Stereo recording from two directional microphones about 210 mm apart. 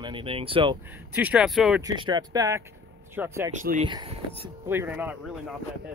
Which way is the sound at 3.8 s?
25° right (ahead or behind).